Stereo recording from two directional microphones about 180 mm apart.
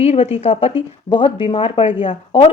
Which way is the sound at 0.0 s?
35° left (ahead or behind).